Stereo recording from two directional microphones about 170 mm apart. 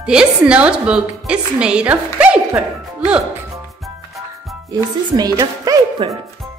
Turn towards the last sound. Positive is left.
turn(degrees=-20)  # may be behind; listen again after turning